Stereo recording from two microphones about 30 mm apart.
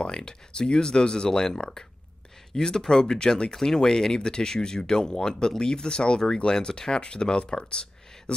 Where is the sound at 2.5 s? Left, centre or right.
Left.